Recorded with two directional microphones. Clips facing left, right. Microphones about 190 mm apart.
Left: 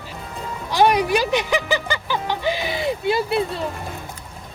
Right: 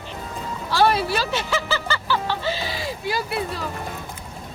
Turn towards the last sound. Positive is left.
turn(degrees=25)  # may be behind; listen again after turning